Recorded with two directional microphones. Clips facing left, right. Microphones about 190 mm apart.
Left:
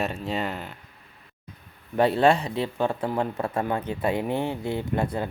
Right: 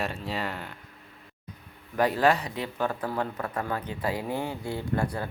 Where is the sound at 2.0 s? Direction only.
25° left (ahead or behind).